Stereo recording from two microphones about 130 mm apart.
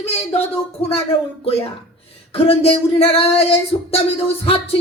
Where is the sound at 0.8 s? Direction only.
50° left (ahead or behind).